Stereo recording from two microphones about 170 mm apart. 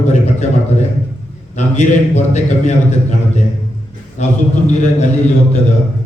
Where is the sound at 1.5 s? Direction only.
45° left (ahead or behind).